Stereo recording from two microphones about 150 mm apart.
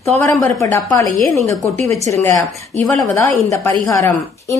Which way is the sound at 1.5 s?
20° left (ahead or behind).